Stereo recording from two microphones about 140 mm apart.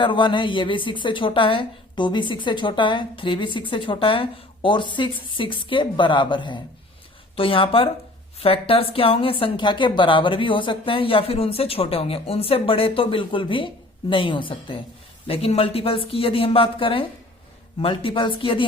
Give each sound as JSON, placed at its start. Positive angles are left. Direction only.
{"t": 0.0, "sound": "a woman's voice", "side_deg": 35}